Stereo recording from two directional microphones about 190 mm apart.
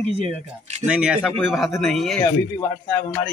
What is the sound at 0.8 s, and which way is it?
Speech, 5° right (ahead or behind).